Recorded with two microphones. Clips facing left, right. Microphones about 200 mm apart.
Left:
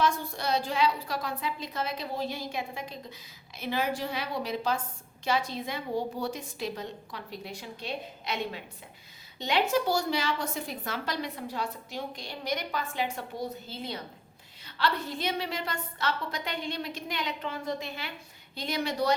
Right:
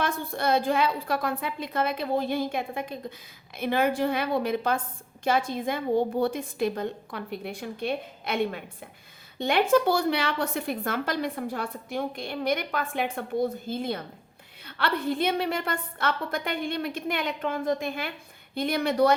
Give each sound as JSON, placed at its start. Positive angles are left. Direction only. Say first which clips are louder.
{"t": 0.0, "sound": "a woman's voice", "louder": "right 1 dB", "side_deg": -55}